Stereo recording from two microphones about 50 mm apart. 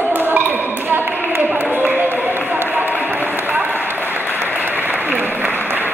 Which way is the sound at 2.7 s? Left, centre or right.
Right.